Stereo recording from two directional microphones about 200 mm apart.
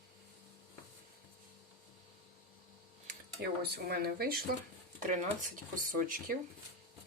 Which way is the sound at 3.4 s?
55° right (ahead or behind).